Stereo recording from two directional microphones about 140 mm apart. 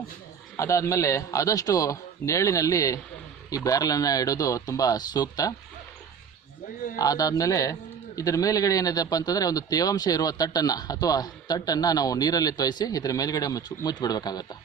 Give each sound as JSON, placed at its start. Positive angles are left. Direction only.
{"t": 0.5, "sound": "a man's voice", "side_deg": 20}
{"t": 6.9, "sound": "a man's voice", "side_deg": 25}